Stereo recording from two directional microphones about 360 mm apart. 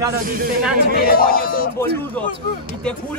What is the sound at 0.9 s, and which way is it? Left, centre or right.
Speech, left.